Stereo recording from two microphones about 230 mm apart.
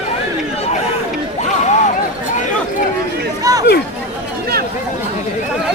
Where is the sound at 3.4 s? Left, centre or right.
Centre.